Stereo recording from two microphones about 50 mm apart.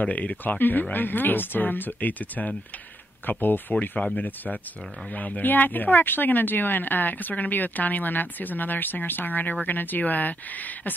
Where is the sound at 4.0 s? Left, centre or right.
Left.